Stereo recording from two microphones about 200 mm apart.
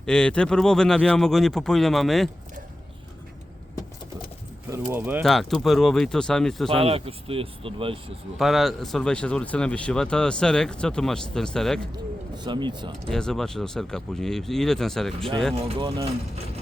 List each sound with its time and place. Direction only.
0.0 s speech: 5° left (ahead or behind)
4.7 s speech: 10° right (ahead or behind)
6.7 s speech: 30° right (ahead or behind)
8.4 s speech: centre (ahead or behind)
12.4 s speech: 25° right (ahead or behind)
13.1 s speech: centre (ahead or behind)
15.5 s speech: 30° right (ahead or behind)